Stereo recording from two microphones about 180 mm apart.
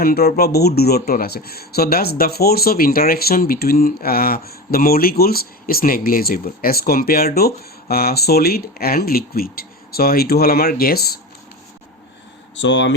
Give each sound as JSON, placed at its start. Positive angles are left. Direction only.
{"t": 0.0, "sound": "speech", "side_deg": 60}
{"t": 12.6, "sound": "speech", "side_deg": 80}